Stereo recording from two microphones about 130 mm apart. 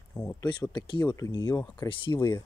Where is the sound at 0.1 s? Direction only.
25° left (ahead or behind).